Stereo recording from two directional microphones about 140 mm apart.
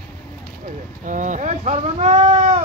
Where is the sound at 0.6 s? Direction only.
65° right (ahead or behind).